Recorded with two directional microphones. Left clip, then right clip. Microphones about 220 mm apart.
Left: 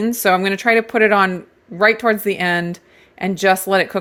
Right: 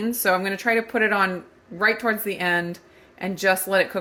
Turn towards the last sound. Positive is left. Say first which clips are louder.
# left 5 dB
turn(degrees=50)  # may be behind; listen again after turning